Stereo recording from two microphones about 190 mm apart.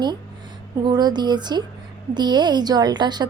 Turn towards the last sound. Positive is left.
turn(degrees=-20)  # may be behind; listen again after turning